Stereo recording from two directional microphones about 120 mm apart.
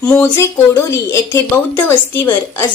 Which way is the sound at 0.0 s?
25° left (ahead or behind).